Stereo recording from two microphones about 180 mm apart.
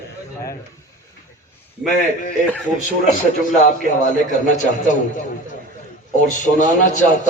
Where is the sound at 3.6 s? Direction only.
45° left (ahead or behind).